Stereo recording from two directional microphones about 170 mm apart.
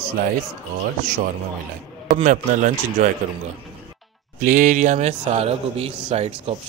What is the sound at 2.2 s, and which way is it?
Speech, 50° right (ahead or behind).